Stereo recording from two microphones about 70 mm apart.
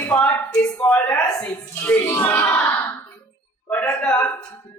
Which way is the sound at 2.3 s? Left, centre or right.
Left.